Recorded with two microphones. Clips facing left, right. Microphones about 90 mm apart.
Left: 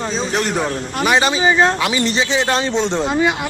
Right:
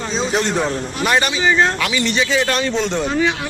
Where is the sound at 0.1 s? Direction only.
Centre (ahead or behind).